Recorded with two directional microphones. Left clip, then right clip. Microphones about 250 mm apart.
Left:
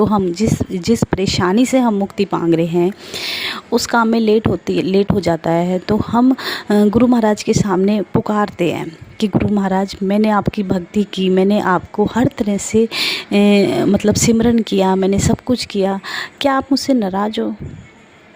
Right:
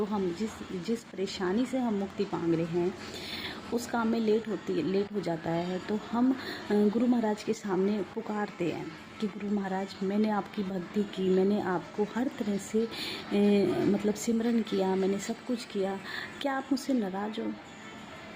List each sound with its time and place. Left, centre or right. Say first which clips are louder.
0.1 s speech: left 16 dB; left